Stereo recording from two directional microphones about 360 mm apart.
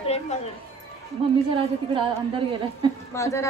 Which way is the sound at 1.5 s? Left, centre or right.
Centre.